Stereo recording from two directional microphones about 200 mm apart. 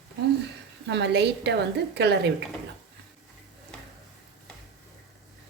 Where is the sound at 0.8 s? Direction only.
60° right (ahead or behind).